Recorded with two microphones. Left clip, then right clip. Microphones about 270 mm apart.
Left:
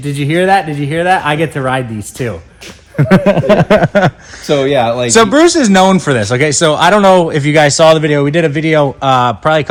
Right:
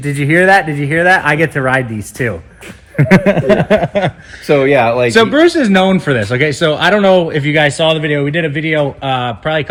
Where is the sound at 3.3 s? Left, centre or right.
Left.